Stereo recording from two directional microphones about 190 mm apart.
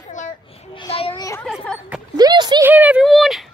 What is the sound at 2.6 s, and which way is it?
Speech, 10° right (ahead or behind).